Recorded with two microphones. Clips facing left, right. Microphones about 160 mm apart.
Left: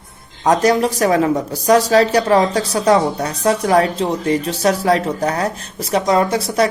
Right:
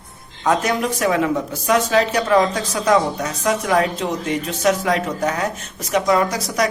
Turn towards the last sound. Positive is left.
turn(degrees=30)  # may be behind; listen again after turning